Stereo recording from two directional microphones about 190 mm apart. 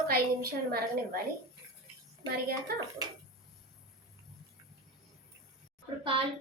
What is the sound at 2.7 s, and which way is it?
Speech, 55° right (ahead or behind).